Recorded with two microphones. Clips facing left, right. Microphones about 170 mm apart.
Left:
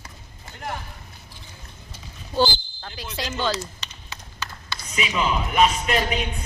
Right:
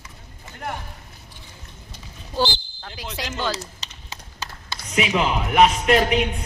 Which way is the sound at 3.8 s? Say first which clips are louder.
Even; 35° right (ahead or behind).